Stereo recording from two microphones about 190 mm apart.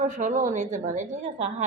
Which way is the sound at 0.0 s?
40° right (ahead or behind).